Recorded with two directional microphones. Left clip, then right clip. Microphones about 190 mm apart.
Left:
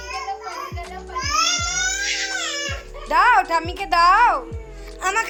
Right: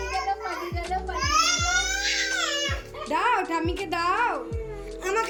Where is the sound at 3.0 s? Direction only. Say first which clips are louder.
Left 9 dB; centre (ahead or behind).